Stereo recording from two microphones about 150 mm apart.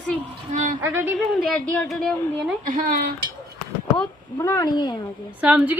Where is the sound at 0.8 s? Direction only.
15° right (ahead or behind).